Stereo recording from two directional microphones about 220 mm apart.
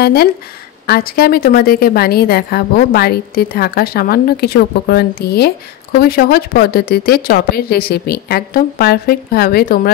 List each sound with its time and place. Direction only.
0.0 s a woman's voice: 45° left (ahead or behind)